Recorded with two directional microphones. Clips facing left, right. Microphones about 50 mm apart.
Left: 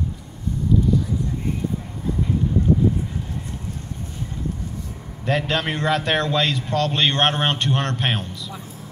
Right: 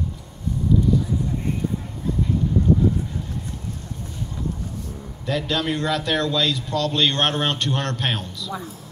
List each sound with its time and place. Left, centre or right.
5.2 s a man's voice: left
7.1 s a man's voice: left